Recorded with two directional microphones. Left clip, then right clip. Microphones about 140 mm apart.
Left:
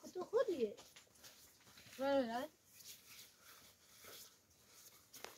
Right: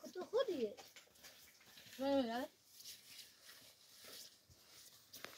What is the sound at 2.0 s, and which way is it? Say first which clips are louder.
Speech: left 1 dB; 5° left (ahead or behind).